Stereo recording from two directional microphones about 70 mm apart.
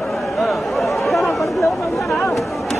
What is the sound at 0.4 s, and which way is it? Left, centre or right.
Chatter, centre.